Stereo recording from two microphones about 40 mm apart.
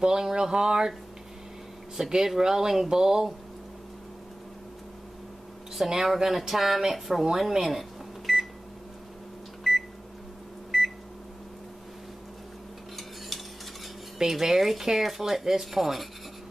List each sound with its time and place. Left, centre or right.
0.0 s speech: centre
2.0 s speech: centre
5.8 s speech: centre
8.3 s microwave oven: centre
9.6 s microwave oven: centre
14.1 s speech: centre